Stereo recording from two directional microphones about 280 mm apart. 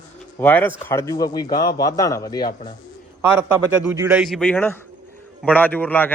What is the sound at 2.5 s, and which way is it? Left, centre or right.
Speech, left.